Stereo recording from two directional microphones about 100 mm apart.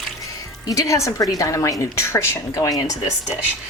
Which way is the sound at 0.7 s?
30° left (ahead or behind).